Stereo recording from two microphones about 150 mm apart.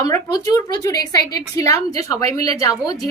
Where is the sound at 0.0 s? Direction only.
25° left (ahead or behind).